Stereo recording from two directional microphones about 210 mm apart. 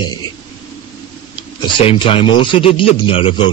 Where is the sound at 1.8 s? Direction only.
25° left (ahead or behind).